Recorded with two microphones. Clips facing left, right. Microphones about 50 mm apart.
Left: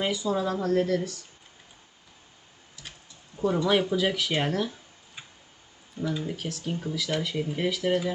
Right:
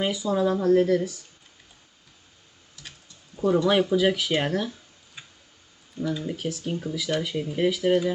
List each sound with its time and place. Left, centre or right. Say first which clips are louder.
0.0 s speech: right 3 dB; centre
3.4 s speech: right 3 dB; centre
6.0 s speech: right 2 dB; centre
6.2 s speech: right 3 dB; centre